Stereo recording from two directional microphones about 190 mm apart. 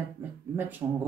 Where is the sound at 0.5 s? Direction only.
10° right (ahead or behind).